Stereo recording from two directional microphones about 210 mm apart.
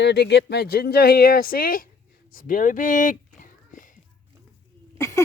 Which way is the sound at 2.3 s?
40° left (ahead or behind).